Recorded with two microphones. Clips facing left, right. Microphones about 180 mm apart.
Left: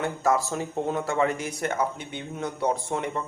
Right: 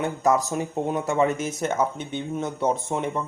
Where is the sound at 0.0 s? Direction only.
20° right (ahead or behind).